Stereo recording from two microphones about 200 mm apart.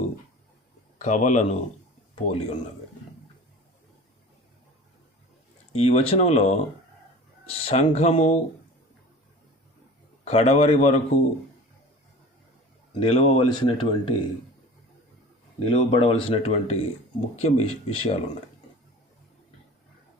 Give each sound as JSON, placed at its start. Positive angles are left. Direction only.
{"t": 0.9, "sound": "a man's voice", "side_deg": 35}
{"t": 5.7, "sound": "a man's voice", "side_deg": 30}
{"t": 10.2, "sound": "a man's voice", "side_deg": 30}
{"t": 12.9, "sound": "speech", "side_deg": 30}
{"t": 15.6, "sound": "a man's voice", "side_deg": 25}